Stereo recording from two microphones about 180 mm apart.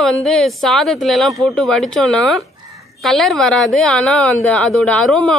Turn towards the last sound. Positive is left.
turn(degrees=5)  # may be behind; listen again after turning